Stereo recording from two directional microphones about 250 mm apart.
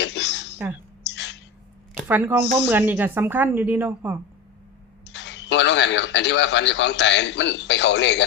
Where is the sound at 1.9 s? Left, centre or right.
Centre.